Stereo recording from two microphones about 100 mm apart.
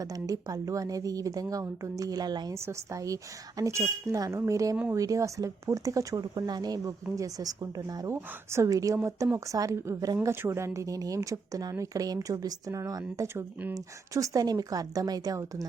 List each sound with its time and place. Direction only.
0.0 s speech: 35° right (ahead or behind)
2.5 s speech: 30° right (ahead or behind)
8.1 s speech: 25° right (ahead or behind)
13.2 s speech: 20° right (ahead or behind)
13.7 s speech: 35° right (ahead or behind)